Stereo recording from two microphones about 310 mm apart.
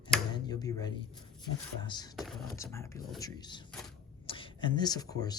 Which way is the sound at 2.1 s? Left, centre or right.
Centre.